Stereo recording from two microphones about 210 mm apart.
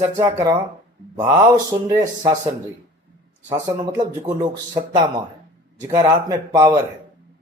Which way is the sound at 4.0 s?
20° right (ahead or behind).